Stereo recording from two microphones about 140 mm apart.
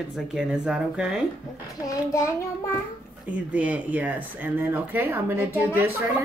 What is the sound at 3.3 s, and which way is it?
Speech, 10° right (ahead or behind).